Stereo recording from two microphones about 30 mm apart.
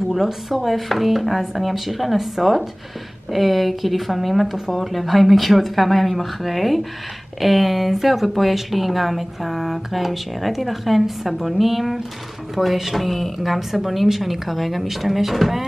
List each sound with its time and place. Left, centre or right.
0.1 s speech: centre
12.6 s speech: right
12.9 s speech: centre